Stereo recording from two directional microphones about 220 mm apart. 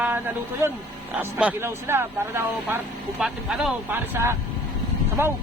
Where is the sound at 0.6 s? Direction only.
10° right (ahead or behind).